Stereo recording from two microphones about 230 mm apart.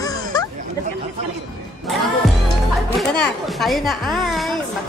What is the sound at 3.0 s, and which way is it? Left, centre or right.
A woman's voice, centre.